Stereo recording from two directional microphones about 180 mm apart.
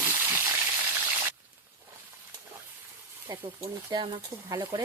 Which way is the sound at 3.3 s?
20° right (ahead or behind).